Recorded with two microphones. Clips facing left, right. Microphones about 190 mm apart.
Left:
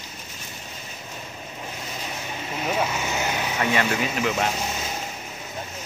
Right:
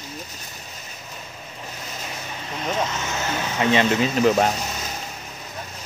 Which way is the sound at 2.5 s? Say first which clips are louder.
Even; 10° left (ahead or behind).